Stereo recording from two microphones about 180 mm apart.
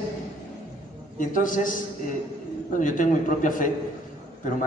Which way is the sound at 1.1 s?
50° left (ahead or behind).